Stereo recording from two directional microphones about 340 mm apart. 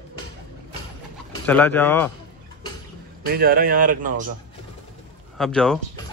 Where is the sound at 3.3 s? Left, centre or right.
Right.